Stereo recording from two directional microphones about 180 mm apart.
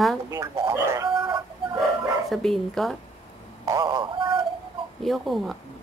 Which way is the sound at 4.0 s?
30° right (ahead or behind).